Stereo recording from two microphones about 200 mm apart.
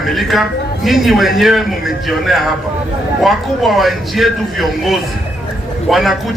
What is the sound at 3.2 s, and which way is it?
A man's voice, centre (ahead or behind).